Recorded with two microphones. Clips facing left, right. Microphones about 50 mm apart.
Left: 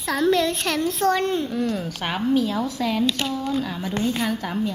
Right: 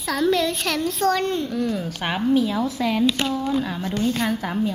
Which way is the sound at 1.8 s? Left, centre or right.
Centre.